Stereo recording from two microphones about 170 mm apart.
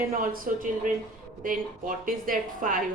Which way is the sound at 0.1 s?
55° right (ahead or behind).